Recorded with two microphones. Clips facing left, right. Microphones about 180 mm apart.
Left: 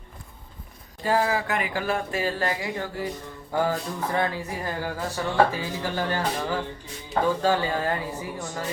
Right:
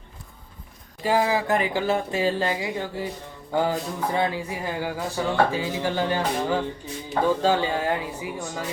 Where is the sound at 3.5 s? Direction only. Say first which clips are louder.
Right 1 dB; 15° right (ahead or behind).